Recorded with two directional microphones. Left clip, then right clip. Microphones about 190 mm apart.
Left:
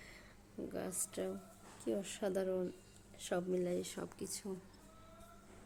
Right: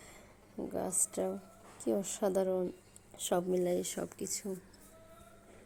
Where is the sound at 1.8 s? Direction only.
15° right (ahead or behind).